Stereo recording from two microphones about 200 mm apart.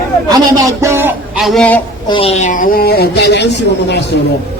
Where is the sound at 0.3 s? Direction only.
15° right (ahead or behind).